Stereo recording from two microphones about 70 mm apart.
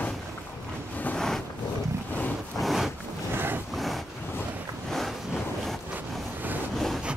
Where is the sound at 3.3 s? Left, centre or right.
Right.